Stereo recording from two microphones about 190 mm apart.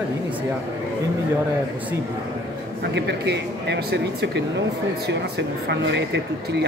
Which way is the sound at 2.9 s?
65° right (ahead or behind).